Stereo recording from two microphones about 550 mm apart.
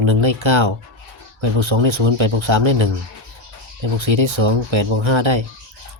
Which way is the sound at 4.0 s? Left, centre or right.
Right.